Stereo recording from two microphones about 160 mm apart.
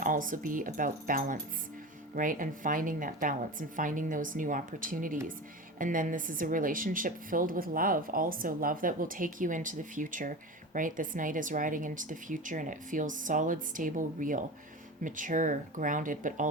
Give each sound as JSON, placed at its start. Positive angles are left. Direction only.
{"t": 0.0, "sound": "a woman's voice", "side_deg": -55}